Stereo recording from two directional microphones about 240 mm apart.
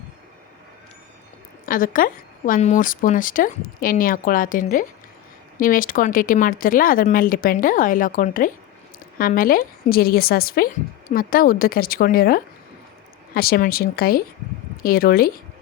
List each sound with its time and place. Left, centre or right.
1.6 s a woman's voice: left